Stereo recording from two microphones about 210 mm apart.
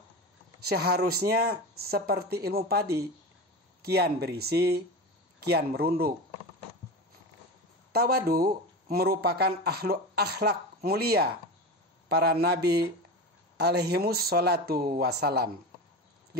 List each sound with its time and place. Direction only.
0.7 s speech: 50° right (ahead or behind)
7.9 s speech: 45° right (ahead or behind)